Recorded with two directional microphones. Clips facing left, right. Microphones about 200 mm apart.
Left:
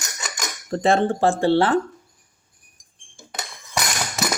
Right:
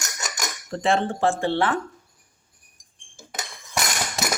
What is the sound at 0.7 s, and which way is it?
Speech, 40° left (ahead or behind).